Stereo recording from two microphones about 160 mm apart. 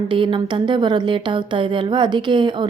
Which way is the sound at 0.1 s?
30° right (ahead or behind).